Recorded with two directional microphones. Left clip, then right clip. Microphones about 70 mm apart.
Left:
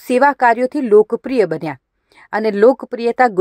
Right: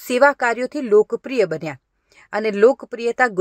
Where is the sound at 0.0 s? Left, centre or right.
Left.